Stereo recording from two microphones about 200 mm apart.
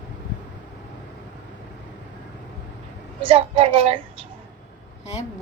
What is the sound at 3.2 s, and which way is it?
Speech, 25° right (ahead or behind).